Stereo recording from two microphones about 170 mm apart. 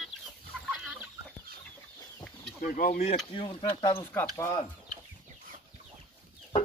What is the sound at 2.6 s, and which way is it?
Speech, 50° left (ahead or behind).